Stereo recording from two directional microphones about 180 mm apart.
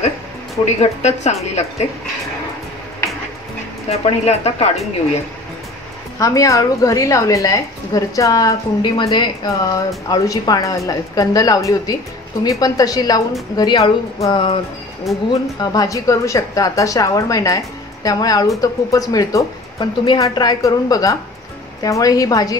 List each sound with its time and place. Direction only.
0.7 s a woman's voice: 40° left (ahead or behind)
3.9 s a woman's voice: 35° left (ahead or behind)
6.1 s a woman's voice: 20° left (ahead or behind)
15.1 s speech: centre (ahead or behind)
15.6 s a woman's voice: 20° left (ahead or behind)